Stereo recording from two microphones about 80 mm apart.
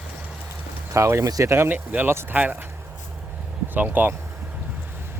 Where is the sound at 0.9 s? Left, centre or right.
Right; by 2.7 s centre.